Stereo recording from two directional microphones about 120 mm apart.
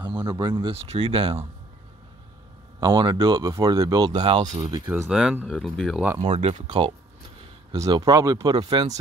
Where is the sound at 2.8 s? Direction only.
40° right (ahead or behind).